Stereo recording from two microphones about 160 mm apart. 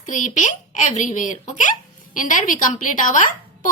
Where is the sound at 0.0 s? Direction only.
50° left (ahead or behind).